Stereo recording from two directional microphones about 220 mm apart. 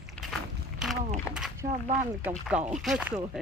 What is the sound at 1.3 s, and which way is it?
Speech, 10° left (ahead or behind).